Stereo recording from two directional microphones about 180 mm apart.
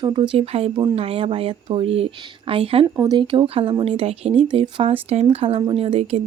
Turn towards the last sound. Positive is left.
turn(degrees=-35)  # may be behind; listen again after turning